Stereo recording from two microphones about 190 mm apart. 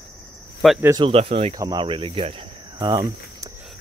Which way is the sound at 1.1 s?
30° right (ahead or behind).